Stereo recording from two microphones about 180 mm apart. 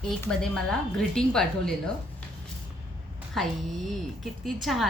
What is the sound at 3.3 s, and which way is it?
A woman's voice, centre (ahead or behind).